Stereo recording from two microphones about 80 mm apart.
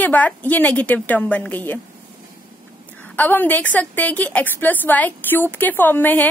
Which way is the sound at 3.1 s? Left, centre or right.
Left.